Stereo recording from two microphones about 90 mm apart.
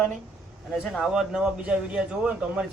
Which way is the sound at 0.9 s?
5° right (ahead or behind).